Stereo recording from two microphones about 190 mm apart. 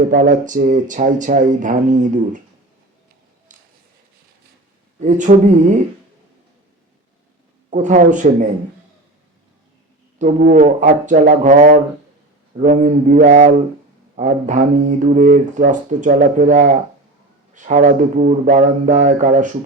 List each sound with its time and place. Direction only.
0.0 s speech: 45° right (ahead or behind)
3.5 s a sound: 45° right (ahead or behind)
4.9 s a man's voice: 40° right (ahead or behind)
7.7 s a man's voice: 40° right (ahead or behind)
10.5 s a man's voice: 40° right (ahead or behind)